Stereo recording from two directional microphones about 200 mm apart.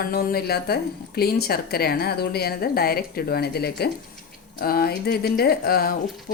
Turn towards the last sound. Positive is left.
turn(degrees=50)  # may be behind; listen again after turning